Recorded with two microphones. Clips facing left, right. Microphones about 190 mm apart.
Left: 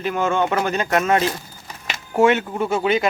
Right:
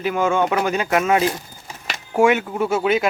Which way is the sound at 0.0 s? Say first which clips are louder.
Right 1 dB; 10° right (ahead or behind).